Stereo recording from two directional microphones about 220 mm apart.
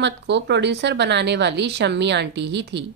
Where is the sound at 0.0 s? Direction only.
50° right (ahead or behind).